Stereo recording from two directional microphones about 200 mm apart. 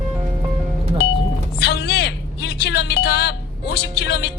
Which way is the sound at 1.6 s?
55° left (ahead or behind).